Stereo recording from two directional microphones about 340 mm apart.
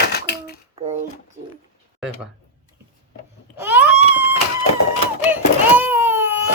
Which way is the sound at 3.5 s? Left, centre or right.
Centre.